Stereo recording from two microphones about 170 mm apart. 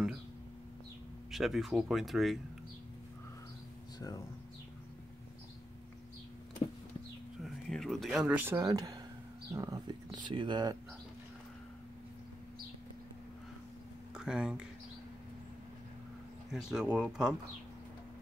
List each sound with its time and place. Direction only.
1.3 s speech: centre (ahead or behind)
7.4 s speech: centre (ahead or behind); by 10.8 s 25° right (ahead or behind)
14.1 s speech: 5° right (ahead or behind)
16.5 s speech: 5° right (ahead or behind)